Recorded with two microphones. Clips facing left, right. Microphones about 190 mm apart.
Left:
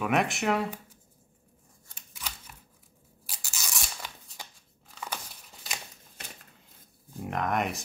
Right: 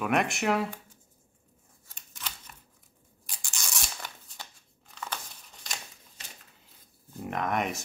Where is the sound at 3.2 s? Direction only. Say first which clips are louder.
Even; centre (ahead or behind).